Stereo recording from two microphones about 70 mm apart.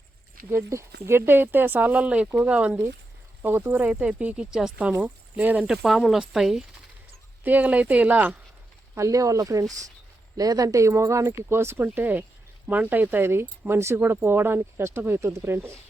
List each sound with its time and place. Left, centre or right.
0.5 s speech: right; by 2.7 s centre
3.4 s speech: right; by 5.0 s centre
5.0 s speech: right
5.6 s speech: centre
7.4 s speech: right
9.0 s speech: right